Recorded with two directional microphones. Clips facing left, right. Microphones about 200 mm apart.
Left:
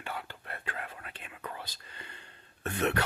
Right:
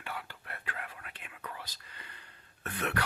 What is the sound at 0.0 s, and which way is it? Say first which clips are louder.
Whispering: left 2 dB; 30° left (ahead or behind).